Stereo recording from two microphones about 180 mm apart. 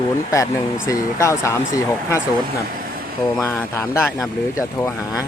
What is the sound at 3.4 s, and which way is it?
Speech, 20° left (ahead or behind).